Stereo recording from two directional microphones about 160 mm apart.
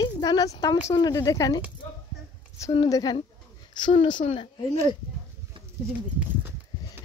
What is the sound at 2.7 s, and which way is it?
A woman's voice, 25° left (ahead or behind).